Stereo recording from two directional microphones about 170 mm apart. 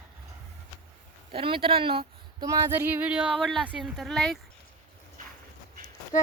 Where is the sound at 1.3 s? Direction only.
30° right (ahead or behind); by 4.3 s centre (ahead or behind).